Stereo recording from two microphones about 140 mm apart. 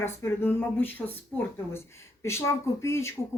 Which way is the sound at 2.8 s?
20° left (ahead or behind).